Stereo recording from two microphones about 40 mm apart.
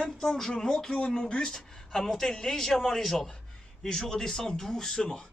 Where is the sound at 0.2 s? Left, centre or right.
Centre.